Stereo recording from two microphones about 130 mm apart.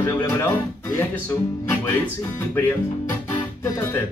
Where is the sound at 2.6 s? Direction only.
15° left (ahead or behind).